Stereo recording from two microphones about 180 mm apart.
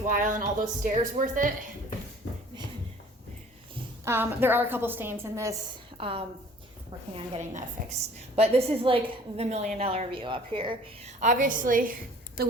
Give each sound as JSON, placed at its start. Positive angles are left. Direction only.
{"t": 0.0, "sound": "speech", "side_deg": -45}
{"t": 4.0, "sound": "a woman's voice", "side_deg": -10}
{"t": 6.0, "sound": "a woman's voice", "side_deg": -30}
{"t": 7.3, "sound": "a woman's voice", "side_deg": -40}
{"t": 11.2, "sound": "speech", "side_deg": -45}